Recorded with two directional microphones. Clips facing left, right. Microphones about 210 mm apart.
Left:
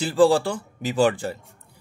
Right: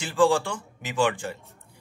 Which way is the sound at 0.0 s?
35° left (ahead or behind).